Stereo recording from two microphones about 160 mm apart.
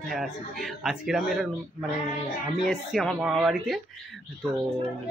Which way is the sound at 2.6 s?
Centre (ahead or behind).